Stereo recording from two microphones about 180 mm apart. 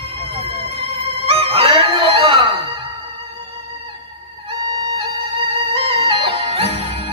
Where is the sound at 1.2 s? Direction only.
30° right (ahead or behind).